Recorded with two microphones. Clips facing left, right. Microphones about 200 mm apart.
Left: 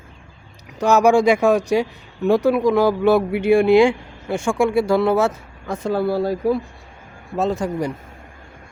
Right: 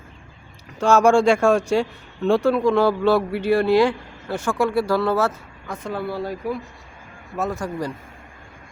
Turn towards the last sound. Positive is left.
turn(degrees=20)  # may be behind; listen again after turning